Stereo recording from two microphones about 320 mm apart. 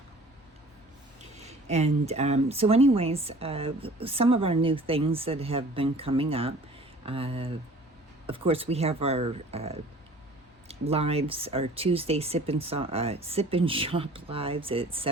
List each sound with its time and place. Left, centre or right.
1.4 s speech: right